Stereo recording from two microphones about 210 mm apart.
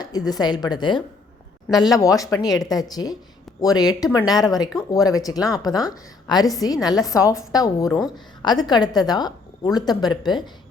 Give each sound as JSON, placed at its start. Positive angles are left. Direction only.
{"t": 0.3, "sound": "a woman's voice", "side_deg": 20}
{"t": 7.9, "sound": "a woman's voice", "side_deg": 0}
{"t": 8.4, "sound": "a woman's voice", "side_deg": 20}